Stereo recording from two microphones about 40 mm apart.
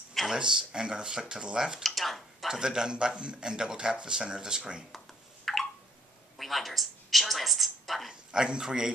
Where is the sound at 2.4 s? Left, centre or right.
Centre.